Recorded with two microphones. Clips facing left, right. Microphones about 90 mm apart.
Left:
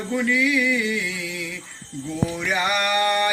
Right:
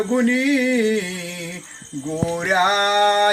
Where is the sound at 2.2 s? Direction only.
40° right (ahead or behind).